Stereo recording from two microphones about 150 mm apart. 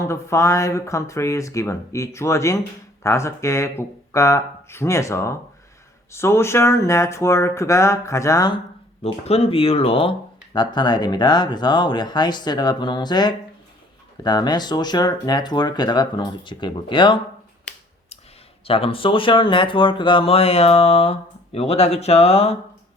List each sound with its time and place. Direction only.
0.0 s speech: 20° left (ahead or behind)
9.2 s speech: 45° left (ahead or behind)
18.6 s speech: 40° left (ahead or behind)